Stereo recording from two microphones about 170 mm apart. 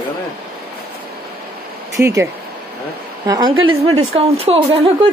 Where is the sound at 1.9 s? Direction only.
15° right (ahead or behind).